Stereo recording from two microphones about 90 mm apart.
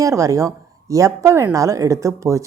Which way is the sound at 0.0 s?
35° right (ahead or behind).